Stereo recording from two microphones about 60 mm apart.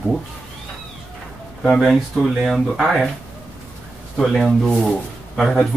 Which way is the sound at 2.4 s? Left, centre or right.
Centre.